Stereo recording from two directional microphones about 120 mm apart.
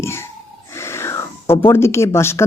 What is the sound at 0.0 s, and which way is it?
Speech, 20° left (ahead or behind).